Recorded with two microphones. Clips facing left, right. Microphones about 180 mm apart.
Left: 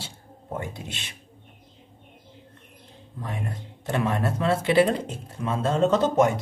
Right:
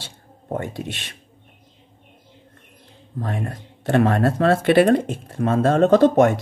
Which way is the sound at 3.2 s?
55° right (ahead or behind).